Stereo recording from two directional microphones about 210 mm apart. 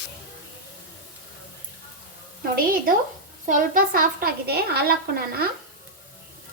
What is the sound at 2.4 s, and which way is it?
A woman's voice, 45° right (ahead or behind).